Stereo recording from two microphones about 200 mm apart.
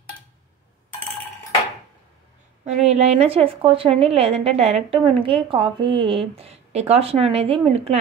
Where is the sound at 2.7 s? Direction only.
35° right (ahead or behind).